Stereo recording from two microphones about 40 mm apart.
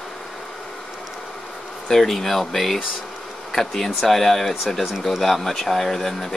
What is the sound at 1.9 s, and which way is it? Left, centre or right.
Speech, centre.